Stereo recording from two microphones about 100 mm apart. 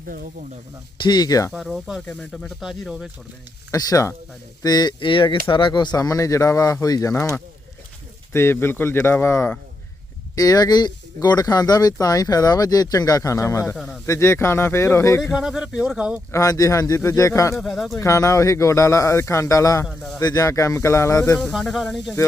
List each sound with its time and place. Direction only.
1.0 s speech: 45° left (ahead or behind)
1.5 s speech: 5° right (ahead or behind)
2.0 s speech: 10° left (ahead or behind)
2.6 s speech: centre (ahead or behind)
3.7 s speech: 35° left (ahead or behind)
6.0 s speech: 35° left (ahead or behind)
10.3 s speech: 40° left (ahead or behind)
13.7 s speech: centre (ahead or behind)
14.1 s speech: 25° left (ahead or behind)
15.2 s speech: 5° right (ahead or behind)
16.3 s speech: 35° left (ahead or behind)
17.5 s speech: centre (ahead or behind)
17.9 s speech: 30° left (ahead or behind)
21.5 s speech: centre (ahead or behind)